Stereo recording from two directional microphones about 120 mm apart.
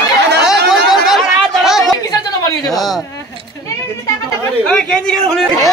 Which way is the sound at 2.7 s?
Centre (ahead or behind).